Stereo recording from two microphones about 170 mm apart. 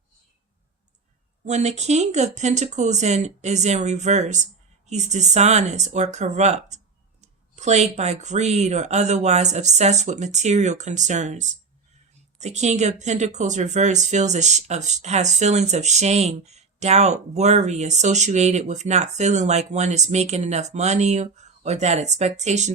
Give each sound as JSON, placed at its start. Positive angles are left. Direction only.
{"t": 1.5, "sound": "speech", "side_deg": -40}